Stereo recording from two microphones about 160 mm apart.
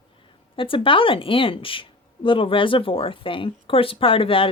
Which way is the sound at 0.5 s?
35° left (ahead or behind).